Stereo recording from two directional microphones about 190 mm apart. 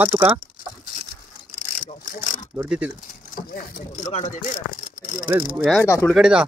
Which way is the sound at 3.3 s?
45° left (ahead or behind).